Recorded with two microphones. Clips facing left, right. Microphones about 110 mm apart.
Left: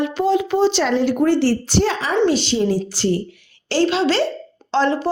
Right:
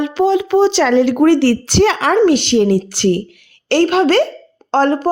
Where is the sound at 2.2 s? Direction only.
65° right (ahead or behind).